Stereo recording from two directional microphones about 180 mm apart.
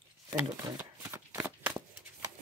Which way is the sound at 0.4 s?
15° right (ahead or behind).